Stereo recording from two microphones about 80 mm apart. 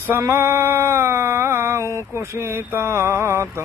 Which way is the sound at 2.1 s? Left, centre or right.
Right.